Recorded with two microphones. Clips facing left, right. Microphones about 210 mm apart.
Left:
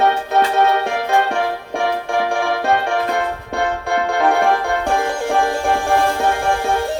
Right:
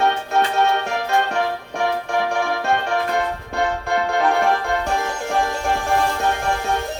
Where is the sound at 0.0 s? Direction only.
55° left (ahead or behind).